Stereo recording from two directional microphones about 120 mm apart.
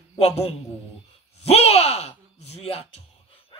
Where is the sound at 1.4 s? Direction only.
60° left (ahead or behind).